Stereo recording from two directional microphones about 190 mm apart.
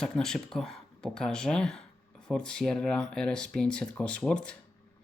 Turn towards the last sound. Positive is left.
turn(degrees=5)  # may be behind; listen again after turning